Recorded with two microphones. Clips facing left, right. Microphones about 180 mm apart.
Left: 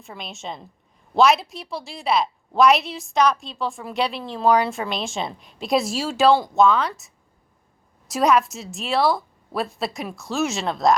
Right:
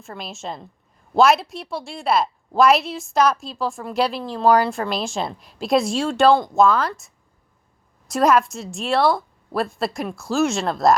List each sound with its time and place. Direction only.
0.0 s a woman's voice: centre (ahead or behind)